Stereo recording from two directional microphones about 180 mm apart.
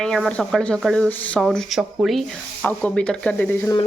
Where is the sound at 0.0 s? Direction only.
5° left (ahead or behind).